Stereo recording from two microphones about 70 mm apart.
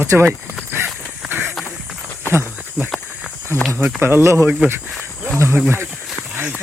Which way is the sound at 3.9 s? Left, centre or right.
Right.